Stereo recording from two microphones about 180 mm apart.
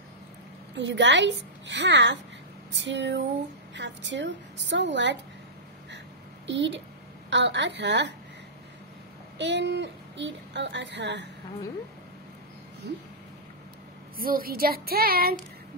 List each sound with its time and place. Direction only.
0.7 s speech: 80° right
6.4 s a woman's voice: 85° right
9.4 s speech: 75° right (ahead or behind)
14.1 s speech: 55° right (ahead or behind)